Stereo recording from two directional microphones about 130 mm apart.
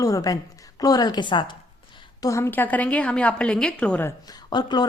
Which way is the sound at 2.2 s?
20° left (ahead or behind).